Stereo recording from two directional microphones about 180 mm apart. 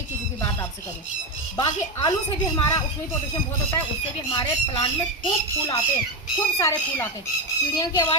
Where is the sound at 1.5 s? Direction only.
20° left (ahead or behind).